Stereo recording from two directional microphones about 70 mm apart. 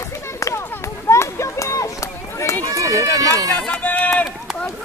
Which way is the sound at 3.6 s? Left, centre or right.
Left.